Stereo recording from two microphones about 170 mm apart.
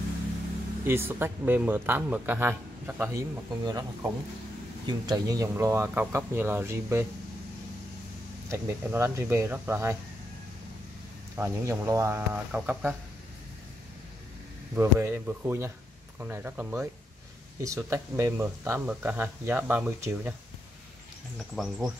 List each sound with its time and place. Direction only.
0.8 s speech: 10° right (ahead or behind)
8.5 s speech: 15° right (ahead or behind)
11.3 s speech: 15° right (ahead or behind)
14.8 s speech: 15° right (ahead or behind)
21.4 s speech: centre (ahead or behind)